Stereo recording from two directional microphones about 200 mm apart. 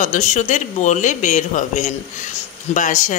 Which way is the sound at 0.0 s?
40° left (ahead or behind).